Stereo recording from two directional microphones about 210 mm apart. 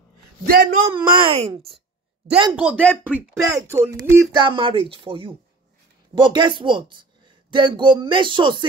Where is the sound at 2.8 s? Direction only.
5° left (ahead or behind).